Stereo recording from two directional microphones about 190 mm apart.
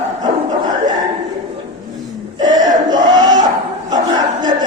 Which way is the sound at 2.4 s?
20° right (ahead or behind).